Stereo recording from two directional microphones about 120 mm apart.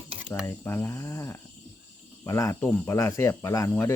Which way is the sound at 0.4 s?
20° left (ahead or behind).